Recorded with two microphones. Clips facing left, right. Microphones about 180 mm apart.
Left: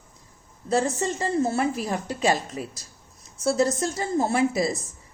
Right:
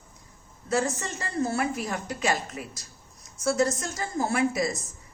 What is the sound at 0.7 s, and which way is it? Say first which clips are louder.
A woman's voice: left 4 dB; 30° left (ahead or behind).